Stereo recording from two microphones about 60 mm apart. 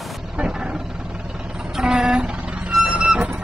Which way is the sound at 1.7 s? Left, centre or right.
Centre.